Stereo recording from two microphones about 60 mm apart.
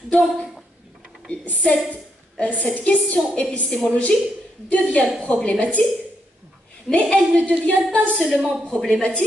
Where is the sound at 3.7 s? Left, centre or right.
Centre.